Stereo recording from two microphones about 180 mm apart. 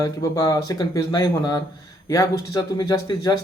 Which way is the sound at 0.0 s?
20° left (ahead or behind).